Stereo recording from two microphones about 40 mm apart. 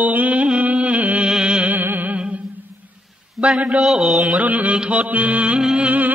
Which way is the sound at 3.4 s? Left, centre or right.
Right.